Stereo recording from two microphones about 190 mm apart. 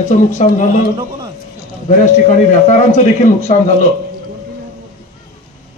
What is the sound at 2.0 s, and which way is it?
Speech, 40° left (ahead or behind).